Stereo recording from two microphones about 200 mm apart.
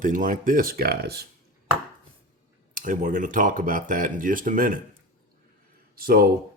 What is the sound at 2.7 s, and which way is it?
Speech, 40° right (ahead or behind).